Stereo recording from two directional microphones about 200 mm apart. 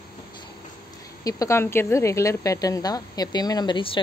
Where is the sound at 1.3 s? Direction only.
15° left (ahead or behind).